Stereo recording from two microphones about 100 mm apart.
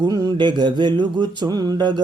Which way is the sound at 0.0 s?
40° right (ahead or behind).